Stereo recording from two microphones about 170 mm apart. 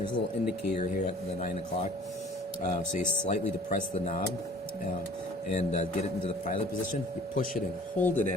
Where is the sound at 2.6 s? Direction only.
50° left (ahead or behind).